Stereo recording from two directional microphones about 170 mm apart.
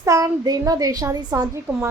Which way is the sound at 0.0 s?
20° right (ahead or behind).